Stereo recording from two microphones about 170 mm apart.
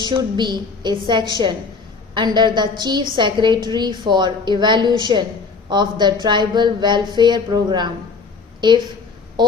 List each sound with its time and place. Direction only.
0.0 s a woman's voice: 25° right (ahead or behind)